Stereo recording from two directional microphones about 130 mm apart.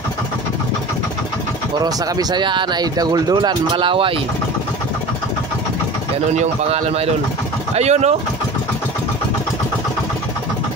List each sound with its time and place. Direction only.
1.8 s speech: 30° right (ahead or behind)
6.3 s speech: 60° right (ahead or behind)